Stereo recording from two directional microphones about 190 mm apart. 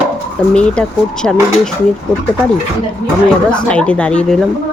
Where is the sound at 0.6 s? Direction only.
5° left (ahead or behind).